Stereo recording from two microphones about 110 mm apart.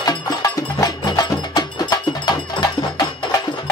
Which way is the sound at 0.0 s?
35° left (ahead or behind).